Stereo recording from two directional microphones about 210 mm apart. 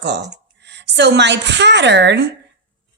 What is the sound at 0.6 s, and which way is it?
A woman's voice, 55° right (ahead or behind).